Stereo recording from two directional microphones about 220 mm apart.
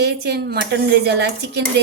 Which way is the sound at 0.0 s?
50° right (ahead or behind).